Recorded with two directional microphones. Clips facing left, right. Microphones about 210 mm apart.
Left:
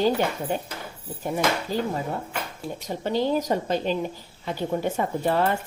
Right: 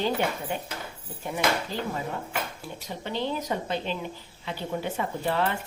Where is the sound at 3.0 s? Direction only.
40° left (ahead or behind).